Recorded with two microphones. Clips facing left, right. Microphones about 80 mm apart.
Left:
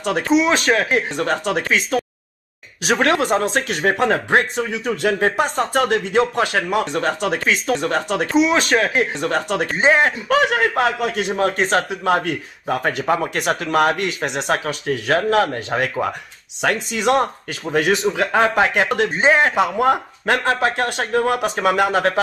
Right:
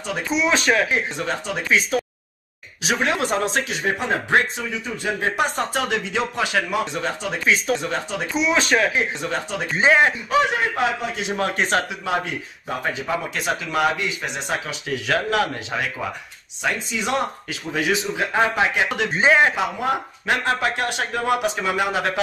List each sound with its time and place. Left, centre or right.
0.0 s speech: left
0.5 s speech: left
0.8 s speech: left
3.2 s speech: left
5.3 s speech: left
5.7 s speech: left
8.4 s speech: left
8.9 s speech: left
11.3 s speech: left
12.0 s speech: left
16.6 s speech: left